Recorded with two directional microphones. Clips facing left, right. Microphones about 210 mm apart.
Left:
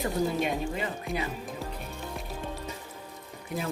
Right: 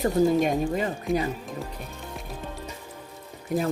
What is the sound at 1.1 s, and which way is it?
Speech, centre (ahead or behind).